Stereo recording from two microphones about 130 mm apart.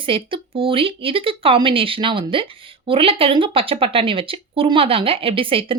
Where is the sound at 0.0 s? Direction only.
40° right (ahead or behind).